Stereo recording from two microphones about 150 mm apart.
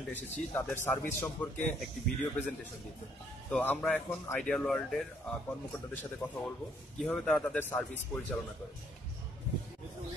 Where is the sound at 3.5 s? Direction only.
10° left (ahead or behind).